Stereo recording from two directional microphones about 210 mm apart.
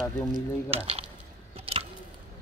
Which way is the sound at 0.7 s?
30° right (ahead or behind).